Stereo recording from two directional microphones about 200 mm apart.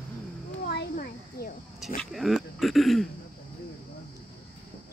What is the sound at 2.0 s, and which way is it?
Speech, centre (ahead or behind).